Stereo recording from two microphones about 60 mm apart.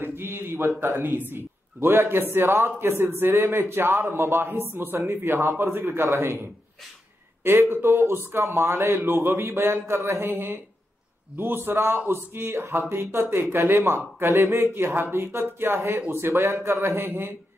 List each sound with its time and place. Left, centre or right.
0.0 s a man's voice: right
5.7 s a man's voice: right
7.7 s a man's voice: right